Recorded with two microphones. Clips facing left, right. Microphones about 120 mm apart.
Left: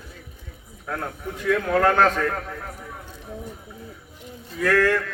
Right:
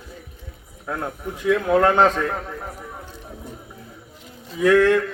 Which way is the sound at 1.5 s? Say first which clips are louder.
Right 3 dB; 15° right (ahead or behind).